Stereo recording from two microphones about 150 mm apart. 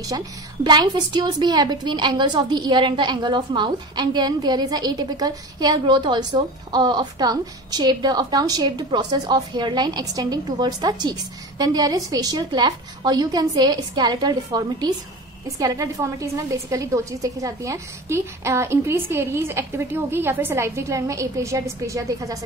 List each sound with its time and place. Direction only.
0.7 s a woman's voice: 30° right (ahead or behind)